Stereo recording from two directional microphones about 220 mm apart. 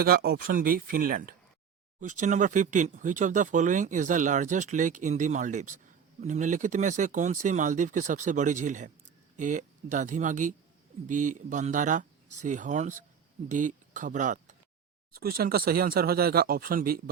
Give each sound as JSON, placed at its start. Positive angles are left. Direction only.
{"t": 0.0, "sound": "speech", "side_deg": -45}